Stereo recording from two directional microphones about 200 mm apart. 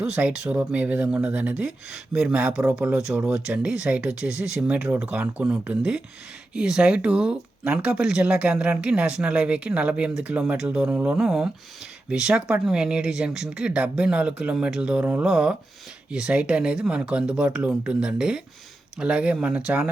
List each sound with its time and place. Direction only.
0.0 s speech: 5° right (ahead or behind)